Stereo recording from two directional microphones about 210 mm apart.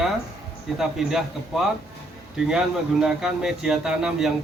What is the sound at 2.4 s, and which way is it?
Speech, 5° right (ahead or behind).